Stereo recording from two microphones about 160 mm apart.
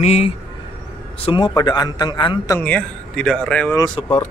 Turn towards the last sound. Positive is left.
turn(degrees=25)  # may be behind; listen again after turning